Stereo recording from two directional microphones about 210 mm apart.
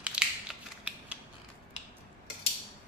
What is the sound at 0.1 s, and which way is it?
Scissors, 5° right (ahead or behind).